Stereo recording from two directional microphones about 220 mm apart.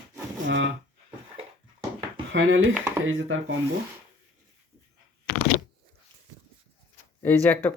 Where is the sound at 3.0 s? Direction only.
65° right (ahead or behind).